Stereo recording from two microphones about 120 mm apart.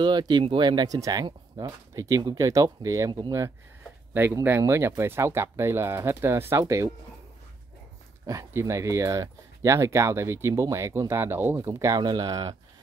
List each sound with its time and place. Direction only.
0.0 s speech: 35° right (ahead or behind)
4.1 s speech: 20° right (ahead or behind)
8.3 s speech: 25° right (ahead or behind)